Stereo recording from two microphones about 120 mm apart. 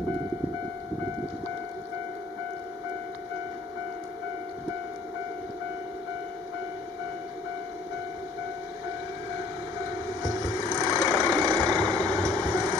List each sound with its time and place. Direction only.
10.5 s vehicle: 30° right (ahead or behind)